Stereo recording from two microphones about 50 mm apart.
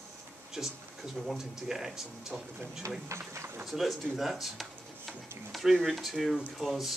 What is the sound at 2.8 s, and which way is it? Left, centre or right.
Speech, right.